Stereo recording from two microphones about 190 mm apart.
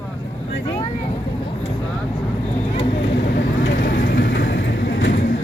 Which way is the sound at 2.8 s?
65° left (ahead or behind).